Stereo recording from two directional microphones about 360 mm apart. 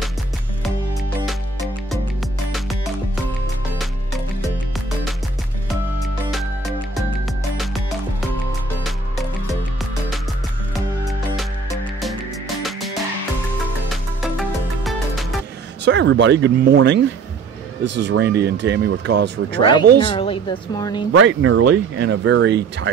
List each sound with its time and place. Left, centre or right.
3.7 s music: centre
14.8 s music: centre
15.8 s speech: right
20.0 s speech: centre
21.1 s speech: right